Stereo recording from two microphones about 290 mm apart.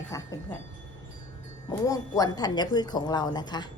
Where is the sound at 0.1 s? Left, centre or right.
Centre.